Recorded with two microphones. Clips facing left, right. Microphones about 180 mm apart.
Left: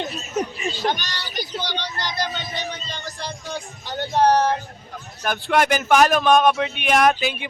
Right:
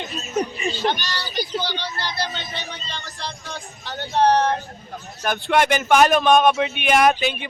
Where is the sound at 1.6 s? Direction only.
20° left (ahead or behind).